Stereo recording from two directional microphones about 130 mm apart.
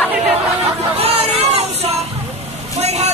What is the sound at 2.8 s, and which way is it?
Vehicle, 55° right (ahead or behind).